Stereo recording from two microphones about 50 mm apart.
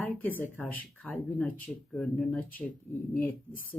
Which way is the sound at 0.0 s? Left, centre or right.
Left.